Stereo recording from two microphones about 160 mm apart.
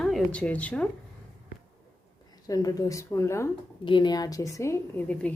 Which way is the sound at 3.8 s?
30° left (ahead or behind).